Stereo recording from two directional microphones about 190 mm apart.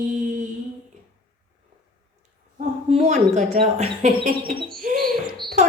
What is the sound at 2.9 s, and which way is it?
Speech, 35° right (ahead or behind).